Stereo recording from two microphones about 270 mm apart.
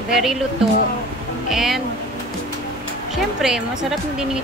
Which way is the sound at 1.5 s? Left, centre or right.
Centre.